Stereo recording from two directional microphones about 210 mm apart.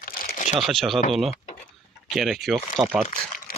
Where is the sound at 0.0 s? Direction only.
45° left (ahead or behind).